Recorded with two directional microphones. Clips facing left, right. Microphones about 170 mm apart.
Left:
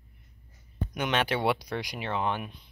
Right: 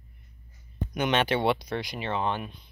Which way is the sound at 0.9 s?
5° left (ahead or behind).